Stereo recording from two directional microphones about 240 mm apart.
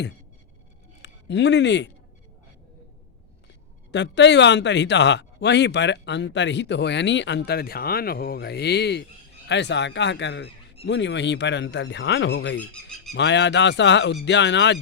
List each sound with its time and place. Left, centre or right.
1.0 s speech: left
3.9 s speech: left